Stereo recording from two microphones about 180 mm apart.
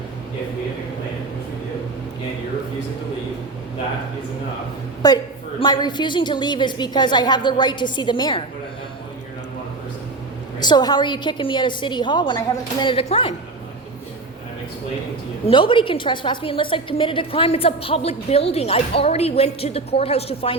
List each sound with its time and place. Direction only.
5.0 s a woman's voice: 25° left (ahead or behind)
10.6 s a woman's voice: 25° left (ahead or behind)
15.4 s a woman's voice: 30° left (ahead or behind)